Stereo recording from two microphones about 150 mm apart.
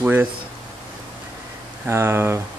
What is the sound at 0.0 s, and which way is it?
Speech, 10° right (ahead or behind).